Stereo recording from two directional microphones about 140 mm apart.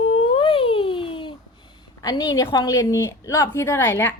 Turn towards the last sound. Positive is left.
turn(degrees=20)  # may be behind; listen again after turning